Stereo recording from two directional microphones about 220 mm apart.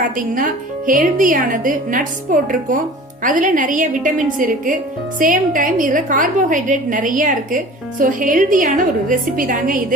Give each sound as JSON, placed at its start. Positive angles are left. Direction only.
{"t": 0.9, "sound": "a woman's voice", "side_deg": -40}